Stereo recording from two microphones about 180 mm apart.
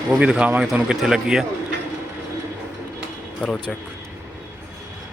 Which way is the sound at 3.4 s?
5° left (ahead or behind).